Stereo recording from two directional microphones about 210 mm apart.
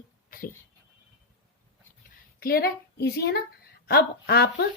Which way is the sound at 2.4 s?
45° left (ahead or behind).